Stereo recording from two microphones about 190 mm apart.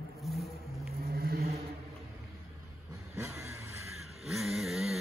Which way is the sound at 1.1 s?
55° right (ahead or behind).